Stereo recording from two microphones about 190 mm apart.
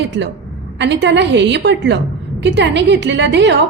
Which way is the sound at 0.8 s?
65° right (ahead or behind).